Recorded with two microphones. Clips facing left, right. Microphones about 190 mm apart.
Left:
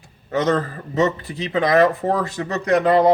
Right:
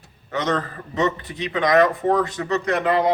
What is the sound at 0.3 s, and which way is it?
Speech, 30° left (ahead or behind).